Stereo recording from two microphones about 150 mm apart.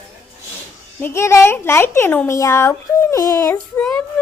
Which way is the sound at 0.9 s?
15° left (ahead or behind).